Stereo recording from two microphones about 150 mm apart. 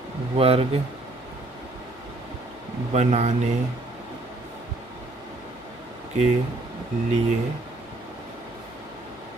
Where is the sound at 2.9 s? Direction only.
45° right (ahead or behind).